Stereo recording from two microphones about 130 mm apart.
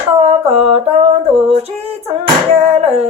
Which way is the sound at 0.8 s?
50° right (ahead or behind).